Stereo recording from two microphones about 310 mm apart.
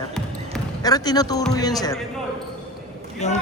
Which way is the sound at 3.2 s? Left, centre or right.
Left.